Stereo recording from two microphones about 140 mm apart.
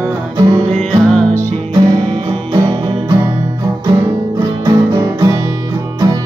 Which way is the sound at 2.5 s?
35° right (ahead or behind).